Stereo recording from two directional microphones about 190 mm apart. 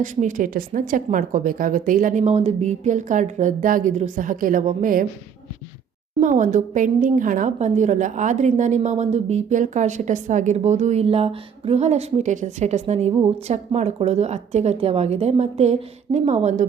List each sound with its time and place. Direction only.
0.0 s speech: 40° right (ahead or behind)
6.1 s a woman's voice: 40° right (ahead or behind)